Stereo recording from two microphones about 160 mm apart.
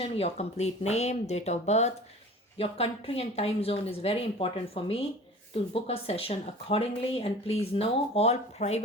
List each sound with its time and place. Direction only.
0.0 s a woman's voice: 40° left (ahead or behind)